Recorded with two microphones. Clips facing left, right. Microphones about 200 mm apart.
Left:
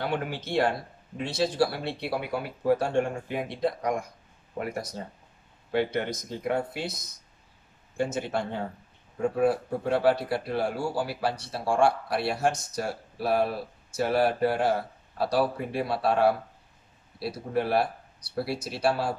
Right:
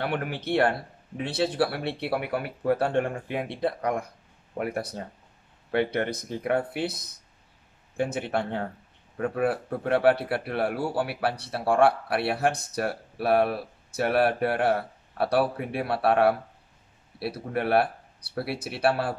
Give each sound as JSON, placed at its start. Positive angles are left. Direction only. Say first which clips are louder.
{"t": 0.0, "sound": "speech", "louder": "right 1 dB", "side_deg": -65}